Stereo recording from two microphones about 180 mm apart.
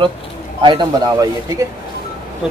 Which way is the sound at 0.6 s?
25° right (ahead or behind).